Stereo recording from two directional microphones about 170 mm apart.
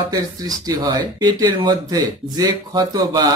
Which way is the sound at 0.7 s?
20° right (ahead or behind).